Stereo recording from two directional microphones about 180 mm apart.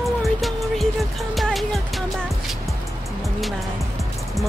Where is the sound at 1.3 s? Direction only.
Centre (ahead or behind).